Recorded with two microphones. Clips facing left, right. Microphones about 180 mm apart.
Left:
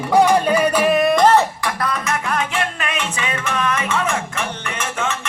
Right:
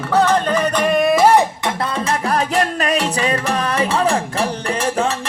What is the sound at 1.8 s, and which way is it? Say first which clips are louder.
Music: right 2 dB; 30° right (ahead or behind).